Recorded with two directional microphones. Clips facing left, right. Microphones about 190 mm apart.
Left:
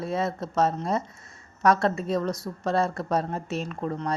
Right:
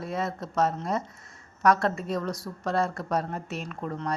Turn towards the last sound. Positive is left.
turn(degrees=25)  # may be behind; listen again after turning